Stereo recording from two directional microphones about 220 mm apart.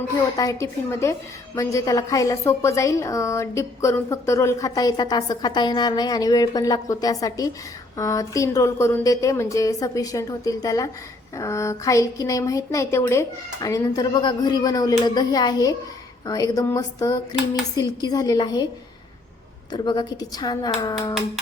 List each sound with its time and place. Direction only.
0.3 s a woman's voice: 15° left (ahead or behind)
19.7 s a woman's voice: 20° left (ahead or behind)